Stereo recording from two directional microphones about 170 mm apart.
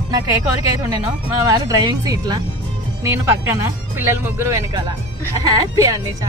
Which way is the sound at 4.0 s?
15° right (ahead or behind).